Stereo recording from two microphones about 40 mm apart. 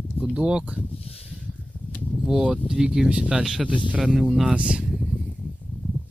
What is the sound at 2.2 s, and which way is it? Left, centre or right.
Speech, centre.